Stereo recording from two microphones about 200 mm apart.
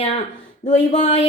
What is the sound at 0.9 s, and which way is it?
Speech, 35° left (ahead or behind).